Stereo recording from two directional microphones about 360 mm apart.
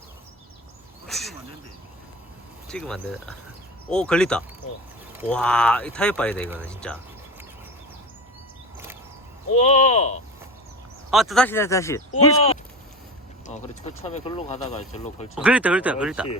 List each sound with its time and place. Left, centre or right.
1.0 s a sound: centre
2.6 s speech: centre
9.6 s speech: centre
11.1 s speech: centre
15.4 s speech: centre